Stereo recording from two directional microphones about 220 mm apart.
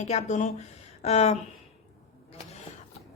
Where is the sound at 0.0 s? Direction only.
30° left (ahead or behind).